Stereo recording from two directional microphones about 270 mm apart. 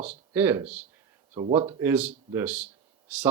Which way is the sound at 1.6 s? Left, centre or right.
Centre.